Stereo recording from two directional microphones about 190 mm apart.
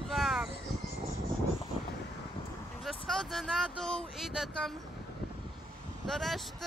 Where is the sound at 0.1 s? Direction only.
Centre (ahead or behind).